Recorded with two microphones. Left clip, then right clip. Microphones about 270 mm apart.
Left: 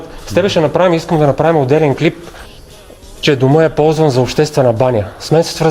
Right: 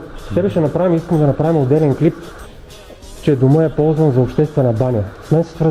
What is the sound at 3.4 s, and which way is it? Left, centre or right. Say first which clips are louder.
Speech: left 5 dB; left.